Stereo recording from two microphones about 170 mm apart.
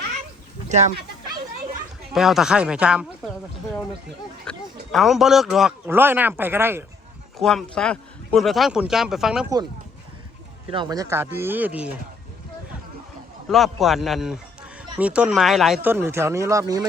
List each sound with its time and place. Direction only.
2.1 s speech: centre (ahead or behind)
4.4 s speech: centre (ahead or behind)
7.3 s speech: centre (ahead or behind)
10.7 s speech: 25° right (ahead or behind); by 11.9 s 10° right (ahead or behind)
13.5 s speech: centre (ahead or behind)
15.8 s speech: 15° right (ahead or behind)